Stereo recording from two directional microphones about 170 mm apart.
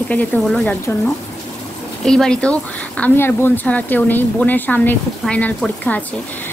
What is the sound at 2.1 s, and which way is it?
Speech, 5° left (ahead or behind).